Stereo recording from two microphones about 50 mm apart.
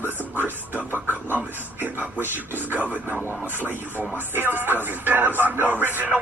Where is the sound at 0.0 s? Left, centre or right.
Right.